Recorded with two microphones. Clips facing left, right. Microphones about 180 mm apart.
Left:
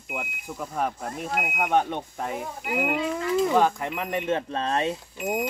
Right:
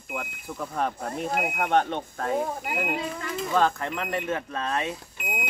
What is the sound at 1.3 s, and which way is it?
Speech, 35° right (ahead or behind).